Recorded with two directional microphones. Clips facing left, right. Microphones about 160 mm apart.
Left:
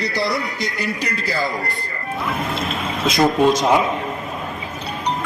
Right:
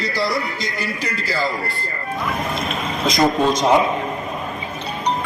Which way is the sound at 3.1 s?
5° left (ahead or behind).